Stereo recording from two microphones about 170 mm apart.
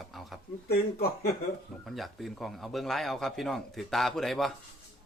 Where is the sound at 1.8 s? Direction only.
Centre (ahead or behind).